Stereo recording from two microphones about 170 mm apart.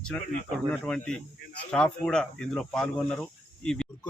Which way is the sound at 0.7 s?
5° left (ahead or behind).